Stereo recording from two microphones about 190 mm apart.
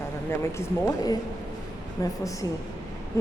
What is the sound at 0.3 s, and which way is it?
A woman's voice, 15° left (ahead or behind).